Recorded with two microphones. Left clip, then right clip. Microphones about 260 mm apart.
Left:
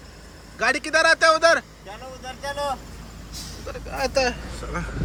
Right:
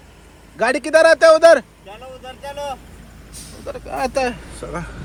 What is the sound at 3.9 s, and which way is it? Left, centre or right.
Speech, centre.